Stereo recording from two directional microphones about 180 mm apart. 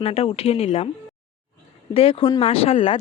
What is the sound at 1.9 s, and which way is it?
Speech, 30° left (ahead or behind).